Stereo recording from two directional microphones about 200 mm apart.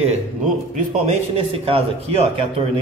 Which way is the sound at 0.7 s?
35° right (ahead or behind).